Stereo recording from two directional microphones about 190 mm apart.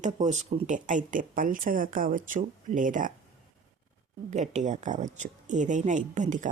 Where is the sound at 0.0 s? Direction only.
40° right (ahead or behind).